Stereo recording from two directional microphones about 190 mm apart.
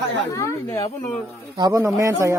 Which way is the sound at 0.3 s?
15° left (ahead or behind).